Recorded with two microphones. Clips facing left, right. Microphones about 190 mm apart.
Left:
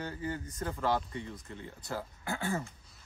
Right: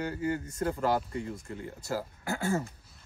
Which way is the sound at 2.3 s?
40° right (ahead or behind).